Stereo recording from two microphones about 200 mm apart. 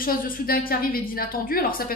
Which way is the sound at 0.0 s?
45° left (ahead or behind).